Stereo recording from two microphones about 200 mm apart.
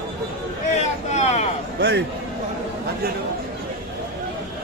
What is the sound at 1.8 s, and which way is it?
Speech, 55° right (ahead or behind).